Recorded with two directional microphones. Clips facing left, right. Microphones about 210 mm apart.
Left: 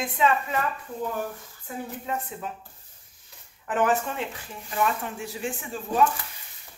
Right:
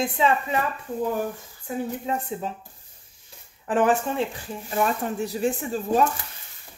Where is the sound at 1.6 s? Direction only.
25° right (ahead or behind).